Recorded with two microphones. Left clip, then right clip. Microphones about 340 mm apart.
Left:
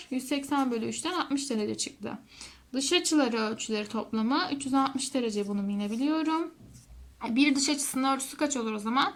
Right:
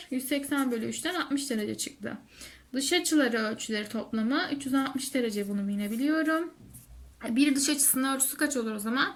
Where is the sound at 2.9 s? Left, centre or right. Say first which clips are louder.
Even; left.